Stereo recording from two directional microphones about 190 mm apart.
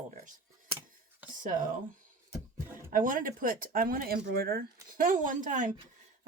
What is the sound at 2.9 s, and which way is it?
Speech, 45° right (ahead or behind).